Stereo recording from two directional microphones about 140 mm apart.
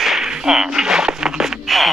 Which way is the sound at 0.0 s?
Centre (ahead or behind).